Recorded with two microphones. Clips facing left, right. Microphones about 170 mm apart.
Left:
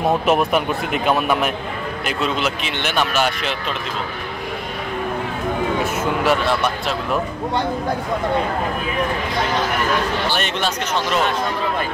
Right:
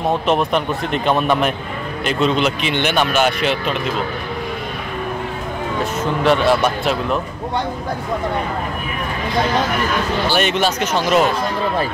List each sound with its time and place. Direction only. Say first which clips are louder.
0.3 s speech: even; 5° left (ahead or behind)
6.2 s speech: right 6 dB; centre (ahead or behind)
10.3 s speech: right 5 dB; 5° right (ahead or behind)